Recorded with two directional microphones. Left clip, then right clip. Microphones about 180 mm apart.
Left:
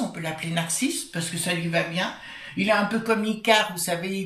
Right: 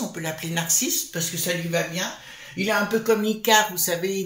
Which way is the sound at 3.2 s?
50° right (ahead or behind).